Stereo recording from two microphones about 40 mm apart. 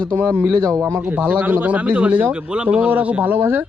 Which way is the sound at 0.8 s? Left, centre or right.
Right.